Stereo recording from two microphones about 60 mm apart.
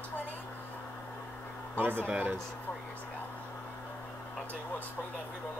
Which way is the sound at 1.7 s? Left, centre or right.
Right.